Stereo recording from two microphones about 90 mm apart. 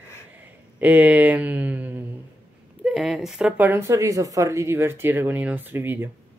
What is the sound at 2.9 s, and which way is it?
Speech, 5° right (ahead or behind).